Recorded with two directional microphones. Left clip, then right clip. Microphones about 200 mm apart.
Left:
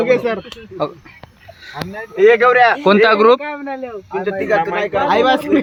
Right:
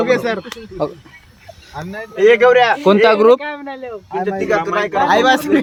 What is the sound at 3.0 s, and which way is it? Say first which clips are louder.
Speech: right 1 dB; 5° right (ahead or behind).